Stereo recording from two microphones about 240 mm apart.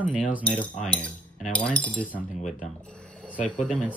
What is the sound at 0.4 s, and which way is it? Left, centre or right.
Speech, centre.